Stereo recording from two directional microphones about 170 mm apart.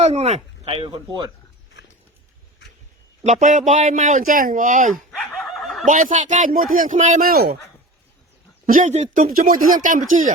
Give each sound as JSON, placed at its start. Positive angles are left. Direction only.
{"t": 0.0, "sound": "speech", "side_deg": -40}
{"t": 3.2, "sound": "a man's voice", "side_deg": -45}
{"t": 5.1, "sound": "snicker", "side_deg": 5}
{"t": 5.8, "sound": "a man's voice", "side_deg": -50}
{"t": 8.6, "sound": "a man's voice", "side_deg": -50}